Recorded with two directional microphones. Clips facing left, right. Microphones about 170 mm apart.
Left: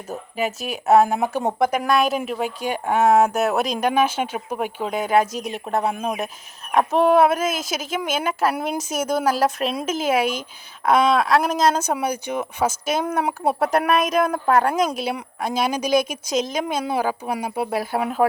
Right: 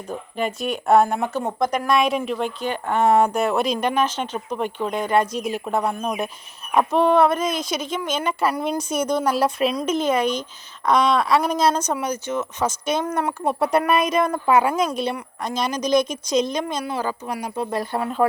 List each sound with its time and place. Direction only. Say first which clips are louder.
0.1 s speech: even; 5° left (ahead or behind)
15.1 s speech: left 2 dB; 10° left (ahead or behind)